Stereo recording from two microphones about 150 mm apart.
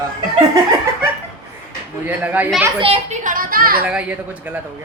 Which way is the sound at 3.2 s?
70° right (ahead or behind).